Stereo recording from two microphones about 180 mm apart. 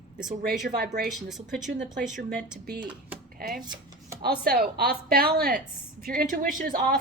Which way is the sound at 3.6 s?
25° right (ahead or behind).